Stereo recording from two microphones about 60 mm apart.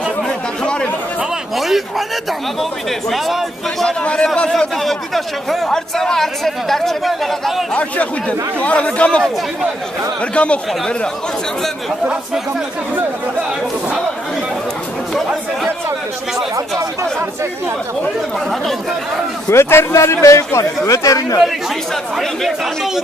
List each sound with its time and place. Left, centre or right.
1.5 s speech: centre
3.1 s speech: centre
3.8 s a man's voice: centre
4.5 s speech: centre
7.7 s speech: left
10.3 s speech: centre
15.1 s speech: centre
19.5 s speech: left
22.1 s a man's voice: centre